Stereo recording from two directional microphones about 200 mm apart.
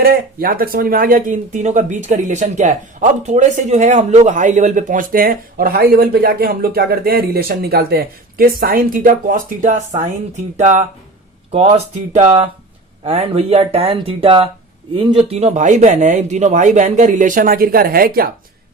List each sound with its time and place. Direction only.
0.0 s speech: 50° right (ahead or behind)